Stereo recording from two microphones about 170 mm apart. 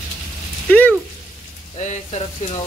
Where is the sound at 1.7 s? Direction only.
45° left (ahead or behind).